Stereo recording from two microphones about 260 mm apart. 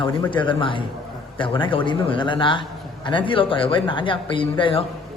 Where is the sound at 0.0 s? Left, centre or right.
Centre.